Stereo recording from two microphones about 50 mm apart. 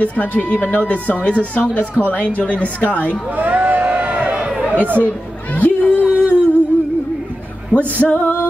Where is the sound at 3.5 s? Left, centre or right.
Right.